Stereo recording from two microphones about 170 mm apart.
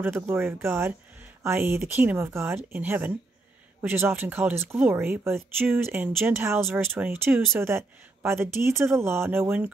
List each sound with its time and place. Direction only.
0.0 s speech: 15° right (ahead or behind)